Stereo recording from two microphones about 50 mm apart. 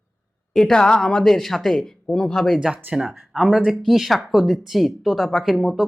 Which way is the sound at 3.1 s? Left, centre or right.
Centre.